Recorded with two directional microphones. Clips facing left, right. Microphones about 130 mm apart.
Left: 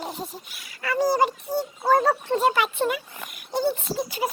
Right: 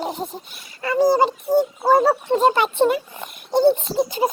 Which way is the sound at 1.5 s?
45° right (ahead or behind).